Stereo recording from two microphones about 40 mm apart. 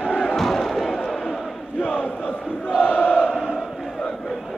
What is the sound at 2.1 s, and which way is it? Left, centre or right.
Crowd, left.